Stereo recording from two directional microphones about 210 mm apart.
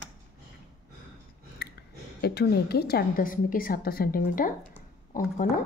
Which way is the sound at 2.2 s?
50° left (ahead or behind).